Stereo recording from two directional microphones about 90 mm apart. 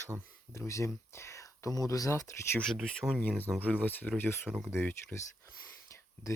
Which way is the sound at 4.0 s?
20° left (ahead or behind).